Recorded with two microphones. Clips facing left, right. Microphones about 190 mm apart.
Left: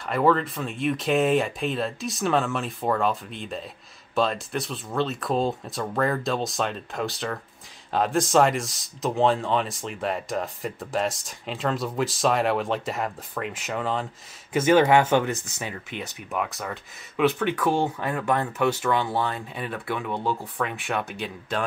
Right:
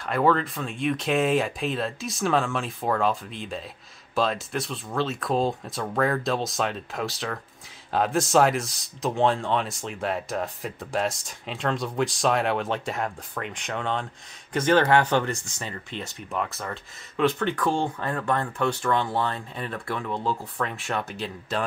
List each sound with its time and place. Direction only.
0.0 s speech: centre (ahead or behind)